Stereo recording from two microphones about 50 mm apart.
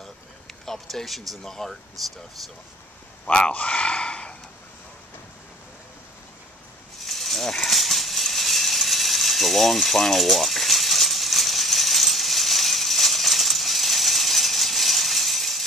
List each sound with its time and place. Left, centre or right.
0.0 s speech: centre
3.3 s gasp: centre
7.0 s a sound: centre